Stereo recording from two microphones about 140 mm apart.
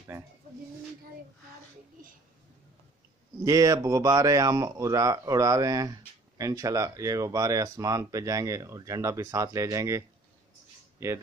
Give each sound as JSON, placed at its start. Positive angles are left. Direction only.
{"t": 3.4, "sound": "speech", "side_deg": -25}